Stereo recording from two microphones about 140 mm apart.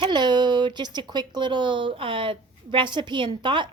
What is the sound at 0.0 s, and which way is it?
Speech, 30° right (ahead or behind).